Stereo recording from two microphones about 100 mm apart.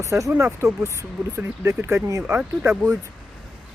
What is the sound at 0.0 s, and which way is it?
Speech, 30° right (ahead or behind).